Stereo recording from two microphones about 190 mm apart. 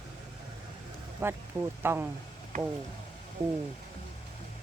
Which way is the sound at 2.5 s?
40° right (ahead or behind).